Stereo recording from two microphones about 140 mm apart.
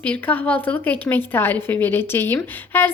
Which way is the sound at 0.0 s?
10° left (ahead or behind).